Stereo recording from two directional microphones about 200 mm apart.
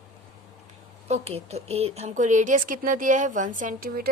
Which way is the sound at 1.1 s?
30° right (ahead or behind).